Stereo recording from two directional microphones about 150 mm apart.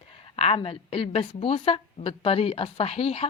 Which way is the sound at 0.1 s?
40° left (ahead or behind).